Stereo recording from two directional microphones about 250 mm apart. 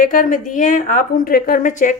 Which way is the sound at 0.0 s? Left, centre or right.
Left.